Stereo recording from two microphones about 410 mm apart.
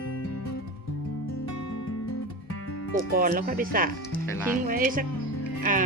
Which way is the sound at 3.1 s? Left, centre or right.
Right.